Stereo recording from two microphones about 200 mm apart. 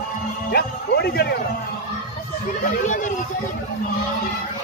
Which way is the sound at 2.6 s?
40° left (ahead or behind).